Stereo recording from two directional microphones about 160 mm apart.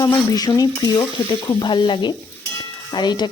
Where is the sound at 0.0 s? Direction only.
20° left (ahead or behind).